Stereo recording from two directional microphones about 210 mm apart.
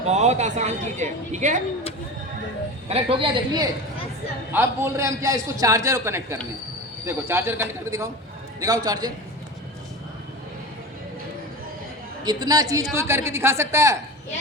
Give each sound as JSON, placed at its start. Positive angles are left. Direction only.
{"t": 0.0, "sound": "a woman's voice", "side_deg": -35}
{"t": 2.9, "sound": "a man's voice", "side_deg": -25}
{"t": 4.5, "sound": "a man's voice", "side_deg": -10}
{"t": 12.2, "sound": "a man's voice", "side_deg": -20}